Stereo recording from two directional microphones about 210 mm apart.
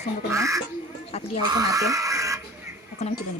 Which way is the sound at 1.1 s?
30° left (ahead or behind).